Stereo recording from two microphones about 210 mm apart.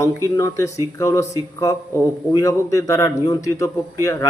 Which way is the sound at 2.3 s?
15° left (ahead or behind).